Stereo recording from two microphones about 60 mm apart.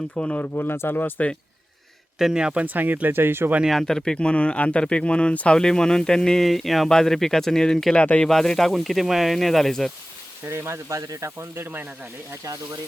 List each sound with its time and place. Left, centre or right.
0.2 s speech: left
0.4 s speech: left
2.1 s speech: centre; by 3.5 s right
3.7 s speech: centre
10.4 s speech: right
11.5 s speech: right